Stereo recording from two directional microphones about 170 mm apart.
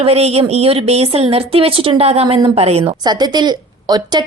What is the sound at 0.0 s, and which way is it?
Speech, 35° right (ahead or behind).